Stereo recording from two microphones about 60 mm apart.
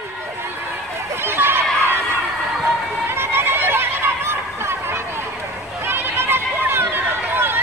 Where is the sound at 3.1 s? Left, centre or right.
Right.